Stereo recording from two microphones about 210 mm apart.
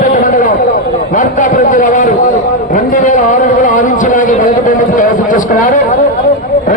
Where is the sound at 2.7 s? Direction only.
35° left (ahead or behind).